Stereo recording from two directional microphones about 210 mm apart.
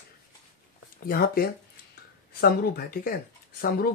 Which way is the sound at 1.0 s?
45° left (ahead or behind).